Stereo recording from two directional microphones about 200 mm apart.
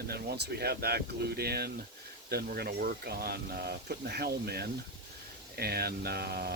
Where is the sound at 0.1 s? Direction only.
55° right (ahead or behind).